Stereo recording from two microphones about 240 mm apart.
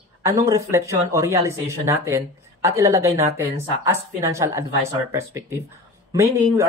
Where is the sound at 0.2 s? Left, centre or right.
Centre.